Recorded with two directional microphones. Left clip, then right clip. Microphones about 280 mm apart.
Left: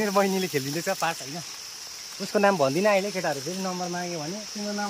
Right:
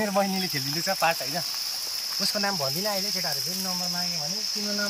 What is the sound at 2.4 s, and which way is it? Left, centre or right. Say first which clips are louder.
Speech: left 10 dB; left.